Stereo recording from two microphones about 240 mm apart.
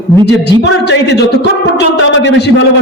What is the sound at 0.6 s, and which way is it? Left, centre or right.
Speech, left.